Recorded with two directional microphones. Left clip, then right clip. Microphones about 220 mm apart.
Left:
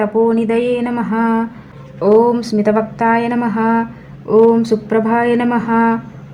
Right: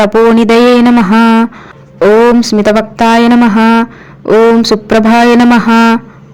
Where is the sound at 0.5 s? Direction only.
45° right (ahead or behind).